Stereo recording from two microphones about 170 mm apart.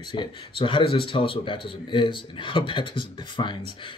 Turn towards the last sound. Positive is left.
turn(degrees=30)  # may be behind; listen again after turning